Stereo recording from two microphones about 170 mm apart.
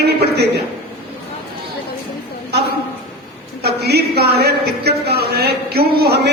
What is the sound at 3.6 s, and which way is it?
A woman's voice, 75° right (ahead or behind).